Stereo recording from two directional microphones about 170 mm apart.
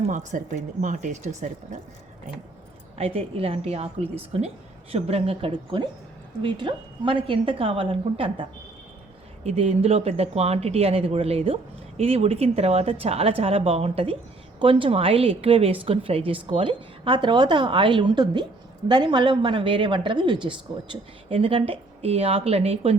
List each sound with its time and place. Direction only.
0.1 s speech: 45° right (ahead or behind)
3.0 s a woman's voice: 35° right (ahead or behind)